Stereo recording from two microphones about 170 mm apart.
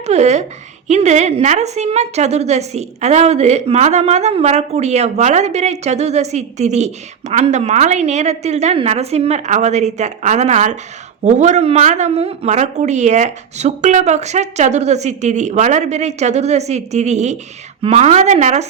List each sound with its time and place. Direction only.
0.0 s a woman's voice: 40° right (ahead or behind)